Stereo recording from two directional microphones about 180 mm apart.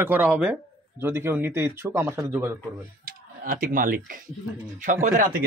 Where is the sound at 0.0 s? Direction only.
10° right (ahead or behind).